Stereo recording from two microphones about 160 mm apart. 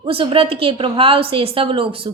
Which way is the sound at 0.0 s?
35° right (ahead or behind).